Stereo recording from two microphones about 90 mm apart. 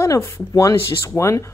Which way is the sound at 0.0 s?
30° left (ahead or behind).